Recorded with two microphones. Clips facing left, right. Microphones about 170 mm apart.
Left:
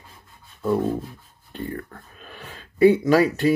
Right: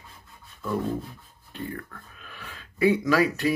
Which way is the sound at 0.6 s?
30° left (ahead or behind).